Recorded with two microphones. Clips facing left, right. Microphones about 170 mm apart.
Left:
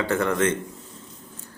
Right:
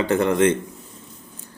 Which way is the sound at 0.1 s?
20° right (ahead or behind).